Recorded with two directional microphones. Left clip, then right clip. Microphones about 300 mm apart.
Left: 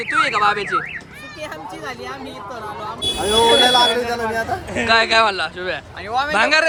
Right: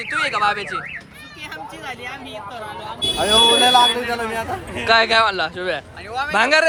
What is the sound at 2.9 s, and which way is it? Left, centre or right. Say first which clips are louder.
Speech: right 3 dB; centre.